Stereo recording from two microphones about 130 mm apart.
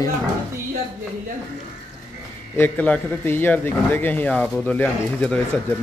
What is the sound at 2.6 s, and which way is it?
A man's voice, 15° left (ahead or behind).